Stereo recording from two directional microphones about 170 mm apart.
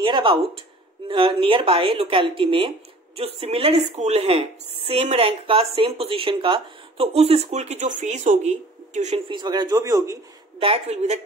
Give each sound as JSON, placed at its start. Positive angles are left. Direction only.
{"t": 0.0, "sound": "speech", "side_deg": -30}
{"t": 9.3, "sound": "a man's voice", "side_deg": -25}
{"t": 10.6, "sound": "speech", "side_deg": -35}